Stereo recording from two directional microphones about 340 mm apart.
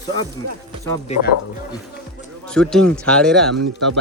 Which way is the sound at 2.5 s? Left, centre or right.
Centre.